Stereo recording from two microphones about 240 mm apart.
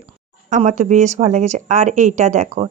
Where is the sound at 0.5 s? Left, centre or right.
Right.